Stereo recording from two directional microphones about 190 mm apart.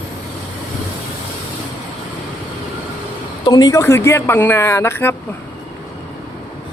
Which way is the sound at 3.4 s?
20° left (ahead or behind).